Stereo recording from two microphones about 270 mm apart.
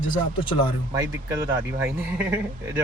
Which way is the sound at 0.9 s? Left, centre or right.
Centre.